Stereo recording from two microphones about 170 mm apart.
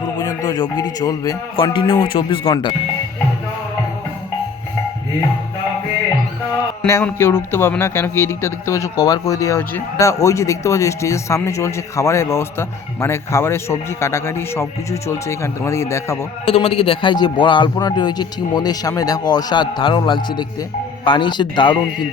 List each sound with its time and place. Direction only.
0.2 s a man's voice: 25° left (ahead or behind)
6.8 s speech: 15° left (ahead or behind)
16.5 s a man's voice: 35° left (ahead or behind)